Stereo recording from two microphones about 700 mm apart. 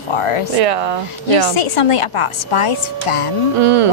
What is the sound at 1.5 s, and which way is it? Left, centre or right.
A woman's voice, left.